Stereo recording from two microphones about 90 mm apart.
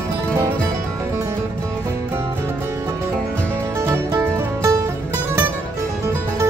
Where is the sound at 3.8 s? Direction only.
35° right (ahead or behind).